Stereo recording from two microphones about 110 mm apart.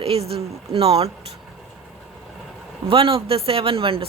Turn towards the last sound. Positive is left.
turn(degrees=-55)  # may be behind; listen again after turning